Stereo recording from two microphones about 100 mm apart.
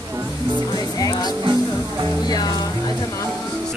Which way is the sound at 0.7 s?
40° left (ahead or behind).